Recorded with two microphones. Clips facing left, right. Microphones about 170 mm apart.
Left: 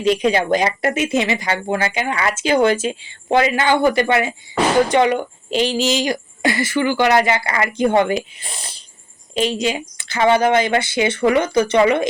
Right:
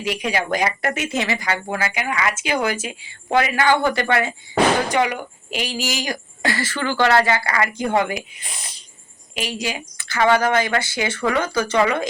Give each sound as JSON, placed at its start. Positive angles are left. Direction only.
{"t": 0.0, "sound": "speech", "side_deg": 25}